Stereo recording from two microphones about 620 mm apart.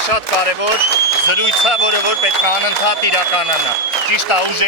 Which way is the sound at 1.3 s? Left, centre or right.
Left.